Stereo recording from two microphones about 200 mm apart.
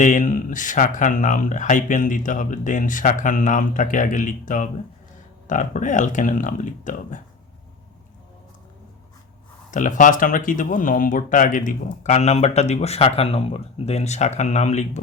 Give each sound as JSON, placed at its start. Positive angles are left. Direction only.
{"t": 0.0, "sound": "speech", "side_deg": 40}
{"t": 9.7, "sound": "speech", "side_deg": 40}